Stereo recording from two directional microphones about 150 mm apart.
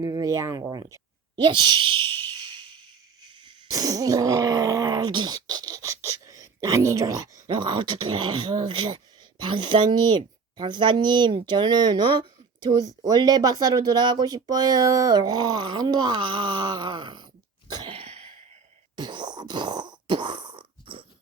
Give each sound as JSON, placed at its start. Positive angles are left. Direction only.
{"t": 0.0, "sound": "speech", "side_deg": -25}
{"t": 1.4, "sound": "a woman's voice", "side_deg": -30}
{"t": 17.7, "sound": "throat clearing", "side_deg": -30}
{"t": 18.9, "sound": "a sound", "side_deg": -30}